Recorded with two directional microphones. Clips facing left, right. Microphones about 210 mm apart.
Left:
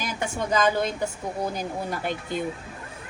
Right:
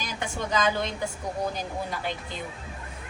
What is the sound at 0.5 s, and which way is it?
Speech, 50° left (ahead or behind).